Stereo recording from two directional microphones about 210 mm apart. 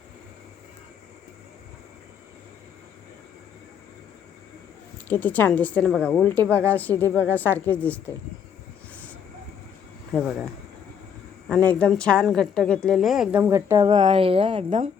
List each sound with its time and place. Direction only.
5.0 s a woman's voice: 10° left (ahead or behind)
10.1 s speech: centre (ahead or behind)
11.4 s a woman's voice: 5° left (ahead or behind); by 13.8 s 10° right (ahead or behind)
14.0 s a woman's voice: 25° right (ahead or behind)